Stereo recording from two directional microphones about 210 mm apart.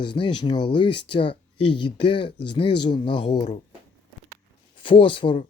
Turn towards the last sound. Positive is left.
turn(degrees=25)  # may be behind; listen again after turning